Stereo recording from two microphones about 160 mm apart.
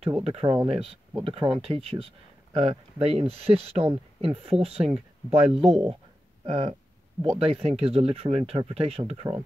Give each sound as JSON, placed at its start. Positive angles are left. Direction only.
{"t": 0.2, "sound": "speech", "side_deg": -40}